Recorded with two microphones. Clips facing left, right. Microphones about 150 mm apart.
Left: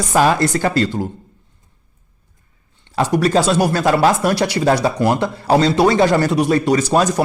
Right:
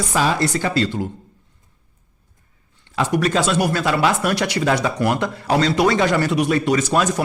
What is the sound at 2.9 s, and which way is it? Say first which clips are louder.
Speech: left 4 dB; 35° left (ahead or behind).